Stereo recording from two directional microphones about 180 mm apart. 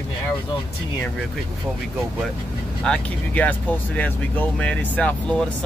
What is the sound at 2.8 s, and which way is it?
Speech, 5° left (ahead or behind).